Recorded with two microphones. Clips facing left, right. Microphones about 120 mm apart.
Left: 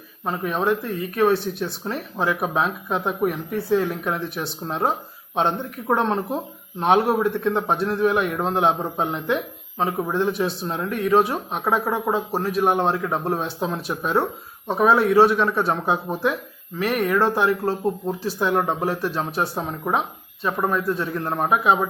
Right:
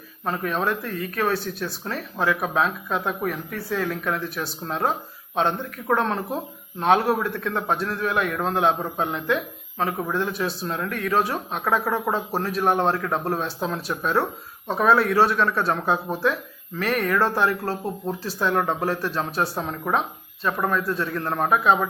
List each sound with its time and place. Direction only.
0.3 s speech: 15° left (ahead or behind)